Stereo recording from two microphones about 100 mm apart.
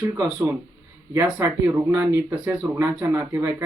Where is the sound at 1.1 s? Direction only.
25° right (ahead or behind).